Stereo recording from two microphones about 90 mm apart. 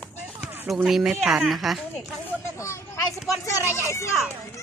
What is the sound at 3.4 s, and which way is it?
Speech, 35° left (ahead or behind).